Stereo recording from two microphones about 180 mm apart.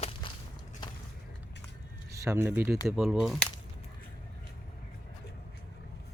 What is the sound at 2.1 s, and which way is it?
Speech, 15° right (ahead or behind).